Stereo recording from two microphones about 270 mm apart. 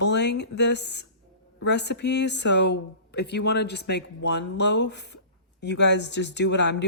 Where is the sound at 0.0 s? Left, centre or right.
Left.